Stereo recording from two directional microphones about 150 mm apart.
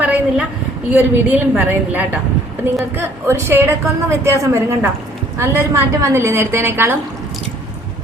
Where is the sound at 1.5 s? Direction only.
10° right (ahead or behind).